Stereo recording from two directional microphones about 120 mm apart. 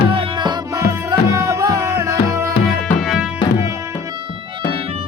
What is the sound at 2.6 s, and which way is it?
Music, centre (ahead or behind).